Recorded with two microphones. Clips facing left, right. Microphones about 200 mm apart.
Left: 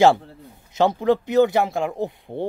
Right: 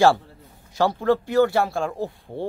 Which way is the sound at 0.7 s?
20° left (ahead or behind).